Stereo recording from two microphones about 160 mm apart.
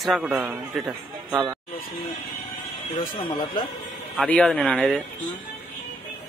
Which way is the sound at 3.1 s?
30° left (ahead or behind).